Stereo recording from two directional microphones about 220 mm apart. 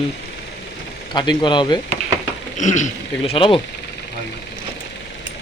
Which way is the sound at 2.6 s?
35° left (ahead or behind).